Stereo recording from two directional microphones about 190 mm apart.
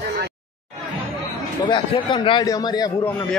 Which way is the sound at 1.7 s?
25° left (ahead or behind).